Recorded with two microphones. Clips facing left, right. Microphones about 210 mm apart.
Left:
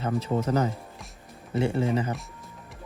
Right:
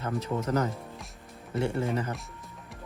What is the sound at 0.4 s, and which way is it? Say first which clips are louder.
Speech: left 2 dB; 25° left (ahead or behind).